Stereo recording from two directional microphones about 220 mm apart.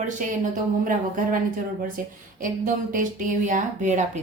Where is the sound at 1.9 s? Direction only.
40° right (ahead or behind).